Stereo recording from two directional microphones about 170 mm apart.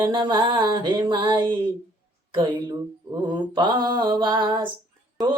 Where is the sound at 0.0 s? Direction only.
25° right (ahead or behind).